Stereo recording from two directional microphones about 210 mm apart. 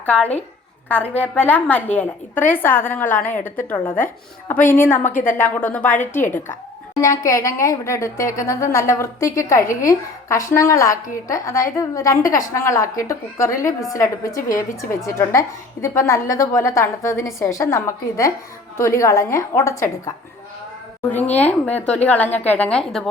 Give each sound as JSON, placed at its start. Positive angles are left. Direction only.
{"t": 0.0, "sound": "a woman's voice", "side_deg": 5}
{"t": 14.3, "sound": "a woman's voice", "side_deg": 40}
{"t": 14.8, "sound": "a woman's voice", "side_deg": 15}
{"t": 21.3, "sound": "a woman's voice", "side_deg": 5}